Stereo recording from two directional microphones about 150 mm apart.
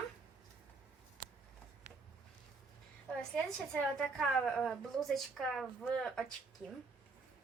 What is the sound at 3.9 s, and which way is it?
A woman's voice, centre (ahead or behind).